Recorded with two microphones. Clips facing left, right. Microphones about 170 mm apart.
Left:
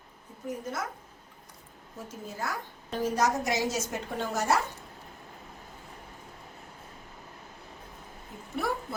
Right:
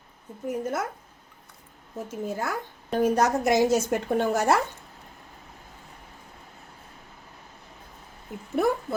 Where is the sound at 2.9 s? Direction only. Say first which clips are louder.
Right 5 dB; 55° right (ahead or behind).